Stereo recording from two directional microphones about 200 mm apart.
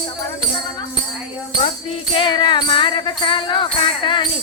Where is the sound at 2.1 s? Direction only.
25° left (ahead or behind).